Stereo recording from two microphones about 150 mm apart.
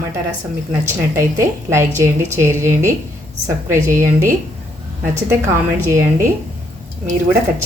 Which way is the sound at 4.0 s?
20° right (ahead or behind).